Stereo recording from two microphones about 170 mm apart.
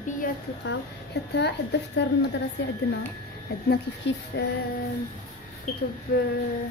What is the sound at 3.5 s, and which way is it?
Speech, 70° left (ahead or behind).